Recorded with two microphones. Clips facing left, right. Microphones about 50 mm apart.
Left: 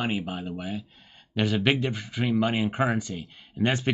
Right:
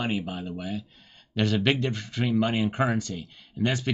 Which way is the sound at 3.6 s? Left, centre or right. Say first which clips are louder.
Left 2 dB; left.